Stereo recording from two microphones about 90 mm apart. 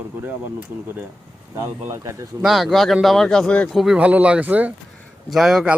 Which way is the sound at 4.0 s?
15° right (ahead or behind).